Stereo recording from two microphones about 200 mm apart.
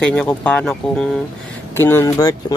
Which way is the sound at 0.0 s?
5° left (ahead or behind).